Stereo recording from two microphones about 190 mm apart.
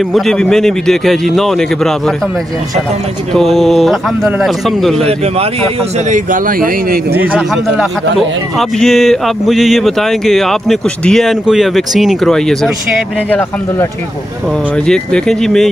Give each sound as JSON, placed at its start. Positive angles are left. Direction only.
{"t": 0.1, "sound": "a man's voice", "side_deg": 0}
{"t": 3.3, "sound": "a man's voice", "side_deg": 0}
{"t": 5.0, "sound": "speech", "side_deg": -30}
{"t": 7.3, "sound": "a man's voice", "side_deg": 0}
{"t": 14.9, "sound": "a man's voice", "side_deg": 5}